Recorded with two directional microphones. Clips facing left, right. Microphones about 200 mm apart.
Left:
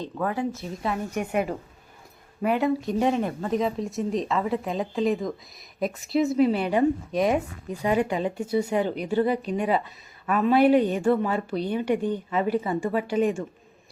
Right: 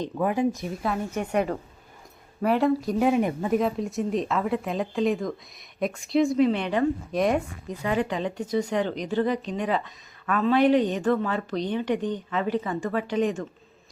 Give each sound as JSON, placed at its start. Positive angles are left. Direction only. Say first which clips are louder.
{"t": 0.0, "sound": "speech", "louder": "right 3 dB", "side_deg": -15}
{"t": 1.1, "sound": "speech", "louder": "right 1 dB", "side_deg": 5}
{"t": 3.2, "sound": "speech", "louder": "right 3 dB", "side_deg": -15}
{"t": 3.6, "sound": "speech", "louder": "right 1 dB", "side_deg": 0}